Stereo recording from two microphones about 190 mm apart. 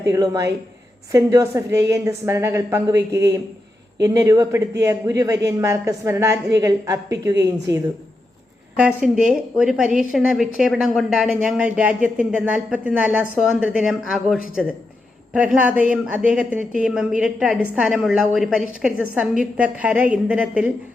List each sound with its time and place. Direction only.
0.1 s a woman's voice: 20° right (ahead or behind)
8.7 s a woman's voice: 5° right (ahead or behind)